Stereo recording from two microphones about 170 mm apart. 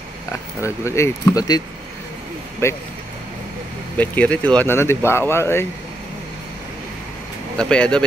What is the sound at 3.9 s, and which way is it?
Speech, 10° left (ahead or behind).